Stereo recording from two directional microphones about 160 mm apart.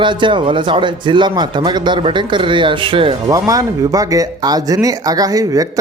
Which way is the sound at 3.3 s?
20° right (ahead or behind).